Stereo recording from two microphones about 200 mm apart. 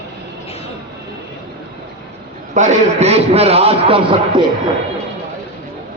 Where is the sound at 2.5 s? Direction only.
35° right (ahead or behind).